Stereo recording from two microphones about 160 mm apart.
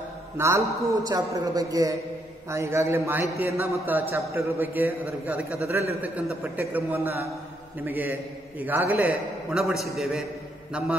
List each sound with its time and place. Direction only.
0.4 s a man's voice: 20° right (ahead or behind); by 10.2 s centre (ahead or behind)